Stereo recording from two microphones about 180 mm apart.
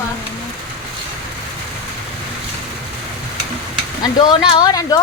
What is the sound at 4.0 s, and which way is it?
Speech, 25° left (ahead or behind).